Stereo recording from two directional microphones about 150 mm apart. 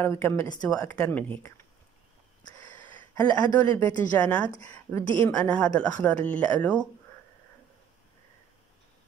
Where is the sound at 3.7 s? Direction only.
10° left (ahead or behind).